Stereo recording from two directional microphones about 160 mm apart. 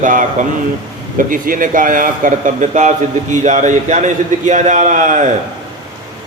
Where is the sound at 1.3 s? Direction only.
60° right (ahead or behind).